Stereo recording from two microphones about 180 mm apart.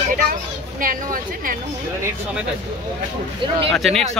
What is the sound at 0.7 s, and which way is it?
Speech, 50° right (ahead or behind).